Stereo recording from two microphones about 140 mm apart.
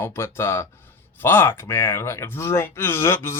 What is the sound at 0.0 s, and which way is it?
Speech, 20° left (ahead or behind).